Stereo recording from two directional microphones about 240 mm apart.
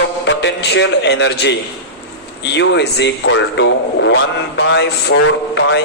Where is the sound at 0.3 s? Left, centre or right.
Left.